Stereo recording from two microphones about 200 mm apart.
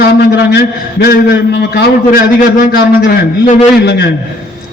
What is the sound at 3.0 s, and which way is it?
A man's voice, 55° left (ahead or behind).